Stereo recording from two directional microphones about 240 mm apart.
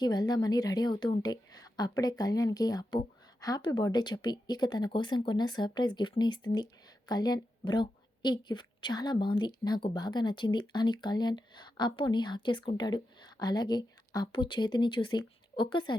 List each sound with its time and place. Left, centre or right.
0.0 s a woman's voice: centre